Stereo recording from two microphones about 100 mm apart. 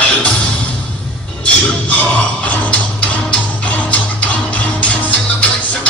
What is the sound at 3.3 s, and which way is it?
Music, 15° left (ahead or behind).